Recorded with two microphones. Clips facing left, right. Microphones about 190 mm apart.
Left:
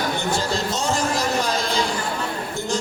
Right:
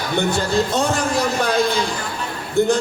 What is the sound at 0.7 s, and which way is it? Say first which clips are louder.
Speech: right 3 dB; 60° right (ahead or behind).